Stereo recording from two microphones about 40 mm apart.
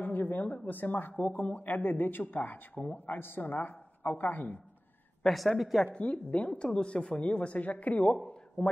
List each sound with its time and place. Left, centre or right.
0.0 s a sound: left
0.4 s speech: left
3.2 s a man's voice: left
5.2 s a woman's voice: centre
6.0 s speech: left